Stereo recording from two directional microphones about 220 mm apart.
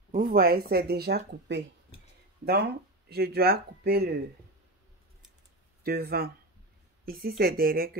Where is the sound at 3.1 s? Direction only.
45° right (ahead or behind).